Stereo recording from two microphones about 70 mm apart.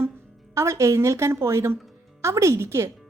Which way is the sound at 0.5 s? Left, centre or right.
Right.